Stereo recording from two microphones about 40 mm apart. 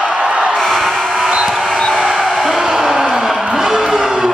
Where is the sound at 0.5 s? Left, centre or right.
Centre.